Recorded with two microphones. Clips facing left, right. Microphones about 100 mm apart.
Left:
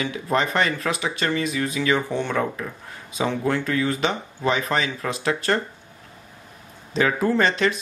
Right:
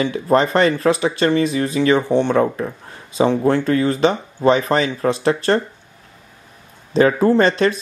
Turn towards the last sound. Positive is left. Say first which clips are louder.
# right 6 dB
turn(degrees=-40)  # may be behind; listen again after turning